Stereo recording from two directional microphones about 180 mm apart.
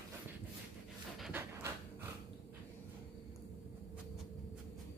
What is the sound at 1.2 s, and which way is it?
Pant, 5° right (ahead or behind).